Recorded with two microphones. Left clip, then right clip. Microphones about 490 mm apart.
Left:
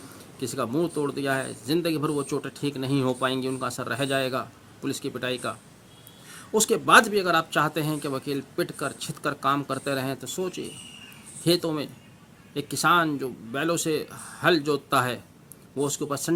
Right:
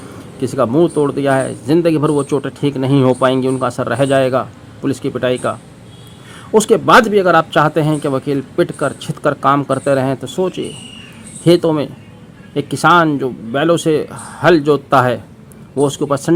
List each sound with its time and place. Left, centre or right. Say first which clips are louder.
0.4 s speech: right 14 dB; left